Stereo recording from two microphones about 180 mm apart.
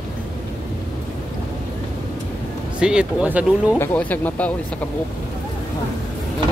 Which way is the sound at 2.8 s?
5° right (ahead or behind).